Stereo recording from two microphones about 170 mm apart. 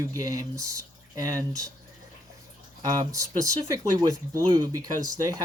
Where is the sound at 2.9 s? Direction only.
20° right (ahead or behind).